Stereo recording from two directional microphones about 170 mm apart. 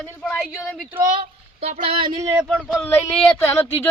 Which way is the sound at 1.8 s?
30° right (ahead or behind).